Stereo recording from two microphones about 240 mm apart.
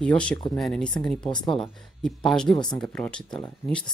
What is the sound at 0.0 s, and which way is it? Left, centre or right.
Speech, centre.